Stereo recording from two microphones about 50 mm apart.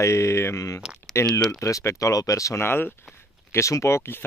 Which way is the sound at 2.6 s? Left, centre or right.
Left.